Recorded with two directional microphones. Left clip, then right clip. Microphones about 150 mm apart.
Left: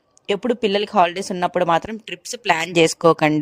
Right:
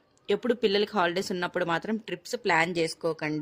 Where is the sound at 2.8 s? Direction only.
70° left (ahead or behind).